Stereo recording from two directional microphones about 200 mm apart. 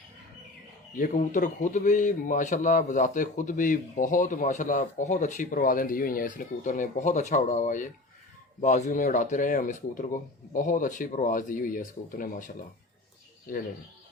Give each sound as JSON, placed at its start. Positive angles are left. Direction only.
{"t": 0.9, "sound": "speech", "side_deg": 40}